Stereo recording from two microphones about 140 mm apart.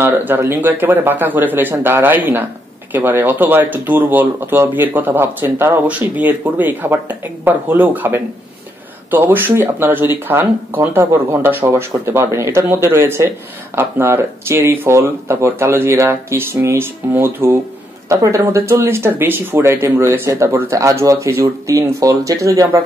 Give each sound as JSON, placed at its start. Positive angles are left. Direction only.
{"t": 0.0, "sound": "speech", "side_deg": -15}